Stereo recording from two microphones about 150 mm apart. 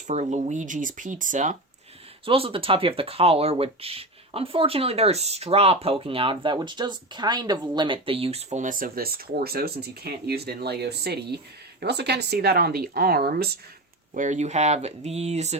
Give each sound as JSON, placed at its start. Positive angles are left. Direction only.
{"t": 0.1, "sound": "speech", "side_deg": -50}
{"t": 2.2, "sound": "speech", "side_deg": -40}
{"t": 14.1, "sound": "speech", "side_deg": -55}